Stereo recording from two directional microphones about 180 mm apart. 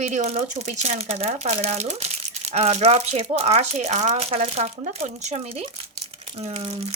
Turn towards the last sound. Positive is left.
turn(degrees=-35)  # may be behind; listen again after turning